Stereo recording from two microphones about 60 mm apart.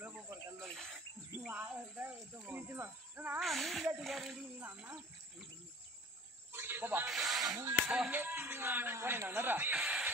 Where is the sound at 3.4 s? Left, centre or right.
Centre.